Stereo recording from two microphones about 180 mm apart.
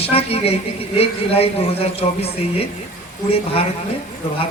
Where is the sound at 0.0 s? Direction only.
35° left (ahead or behind).